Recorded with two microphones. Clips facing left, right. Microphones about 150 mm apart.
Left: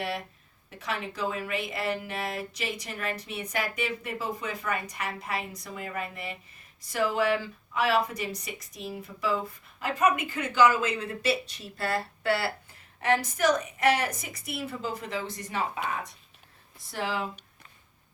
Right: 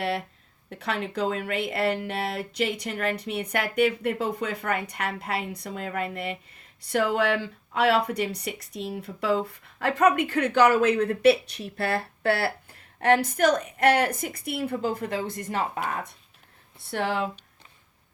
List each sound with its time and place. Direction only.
0.7 s speech: 60° right (ahead or behind)
16.8 s speech: 65° right (ahead or behind)